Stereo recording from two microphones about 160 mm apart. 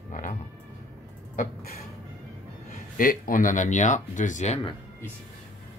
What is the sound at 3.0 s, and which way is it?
Speech, 60° left (ahead or behind).